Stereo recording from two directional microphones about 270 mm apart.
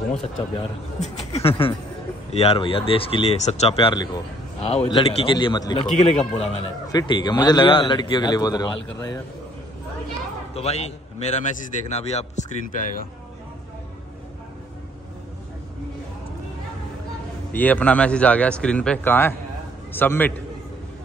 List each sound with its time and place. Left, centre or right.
1.3 s a man's voice: left
10.5 s a man's voice: left
17.5 s speech: centre